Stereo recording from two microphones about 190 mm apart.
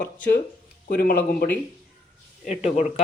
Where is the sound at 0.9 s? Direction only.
55° left (ahead or behind).